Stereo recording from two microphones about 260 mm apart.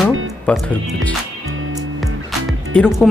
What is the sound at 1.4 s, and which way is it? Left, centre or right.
Music, right.